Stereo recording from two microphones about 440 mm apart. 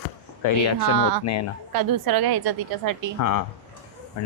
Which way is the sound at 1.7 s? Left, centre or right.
Right.